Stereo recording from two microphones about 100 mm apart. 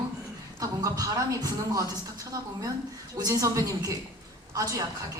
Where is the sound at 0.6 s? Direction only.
35° right (ahead or behind).